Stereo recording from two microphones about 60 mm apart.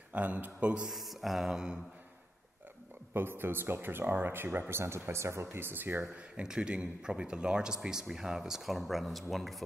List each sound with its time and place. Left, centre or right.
0.1 s speech: right
0.8 s mantra: centre
3.1 s speech: right
6.3 s speech: centre